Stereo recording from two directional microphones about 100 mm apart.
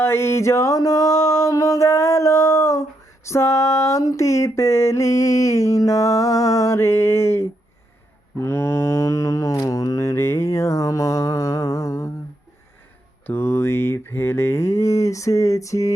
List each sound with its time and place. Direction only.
0.0 s a sound: 25° left (ahead or behind)
8.4 s mantra: 25° left (ahead or behind)
13.2 s mantra: 25° left (ahead or behind)